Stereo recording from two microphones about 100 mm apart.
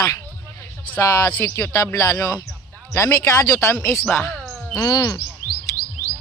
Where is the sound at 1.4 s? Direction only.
30° left (ahead or behind).